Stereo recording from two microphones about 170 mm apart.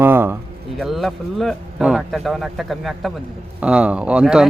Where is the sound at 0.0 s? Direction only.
15° right (ahead or behind).